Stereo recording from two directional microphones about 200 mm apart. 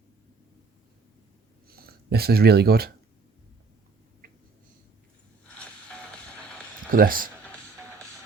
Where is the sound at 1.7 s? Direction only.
50° right (ahead or behind).